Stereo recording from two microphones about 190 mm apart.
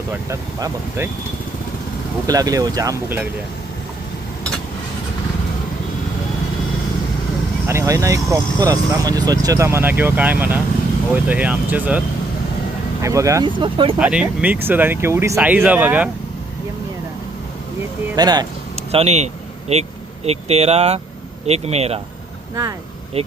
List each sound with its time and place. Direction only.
0.1 s speech: 15° right (ahead or behind)
2.2 s speech: 20° right (ahead or behind)
7.7 s speech: 15° right (ahead or behind)
14.0 s speech: 5° right (ahead or behind)
18.2 s speech: 20° right (ahead or behind)
18.8 s vehicle: 35° right (ahead or behind)
20.2 s speech: 35° right (ahead or behind)
23.2 s speech: 35° right (ahead or behind)